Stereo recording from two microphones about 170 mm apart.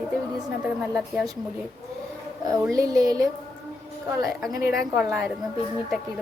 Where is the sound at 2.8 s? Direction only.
20° right (ahead or behind).